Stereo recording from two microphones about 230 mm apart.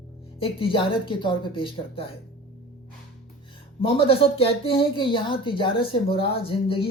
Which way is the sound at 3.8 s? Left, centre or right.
Left.